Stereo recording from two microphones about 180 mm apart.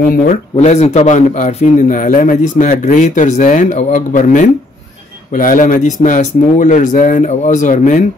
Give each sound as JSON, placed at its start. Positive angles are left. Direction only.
{"t": 0.6, "sound": "a man's voice", "side_deg": 40}